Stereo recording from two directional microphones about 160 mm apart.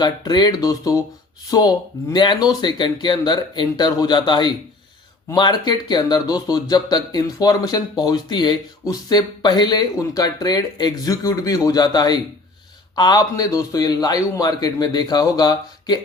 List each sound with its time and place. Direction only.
0.0 s speech: 25° left (ahead or behind)